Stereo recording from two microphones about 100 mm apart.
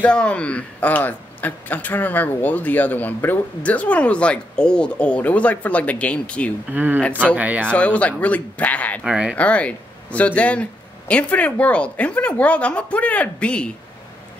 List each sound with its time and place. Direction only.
0.0 s a man's voice: 10° left (ahead or behind)
6.7 s speech: 15° right (ahead or behind)
7.7 s a man's voice: 15° left (ahead or behind)
9.0 s speech: 10° right (ahead or behind)
9.3 s a man's voice: 15° left (ahead or behind)